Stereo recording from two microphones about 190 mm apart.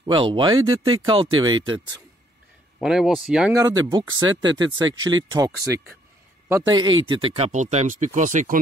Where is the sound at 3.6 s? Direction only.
20° right (ahead or behind); by 8.6 s 40° right (ahead or behind).